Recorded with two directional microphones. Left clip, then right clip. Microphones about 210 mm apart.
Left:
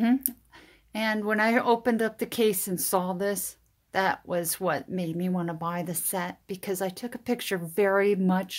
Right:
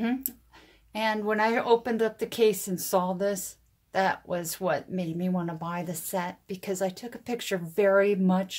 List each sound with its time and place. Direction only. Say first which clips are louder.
0.0 s speech: left 5 dB; 30° left (ahead or behind)